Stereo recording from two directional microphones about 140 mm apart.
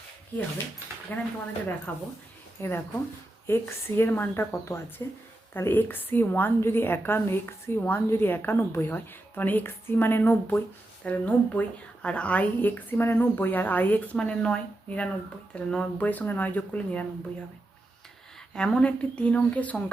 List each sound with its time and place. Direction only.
1.1 s a woman's voice: 15° left (ahead or behind)
18.5 s a woman's voice: 5° left (ahead or behind)